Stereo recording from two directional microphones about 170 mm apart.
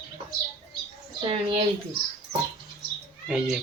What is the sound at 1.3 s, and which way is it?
Speech, 35° right (ahead or behind).